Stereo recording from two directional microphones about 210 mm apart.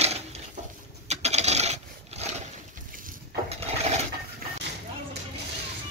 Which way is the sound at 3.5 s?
30° right (ahead or behind).